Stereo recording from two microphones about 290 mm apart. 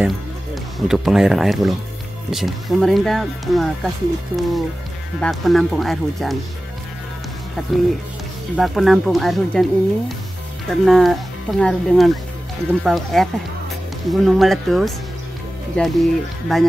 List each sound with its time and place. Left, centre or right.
0.8 s speech: centre
8.5 s speech: centre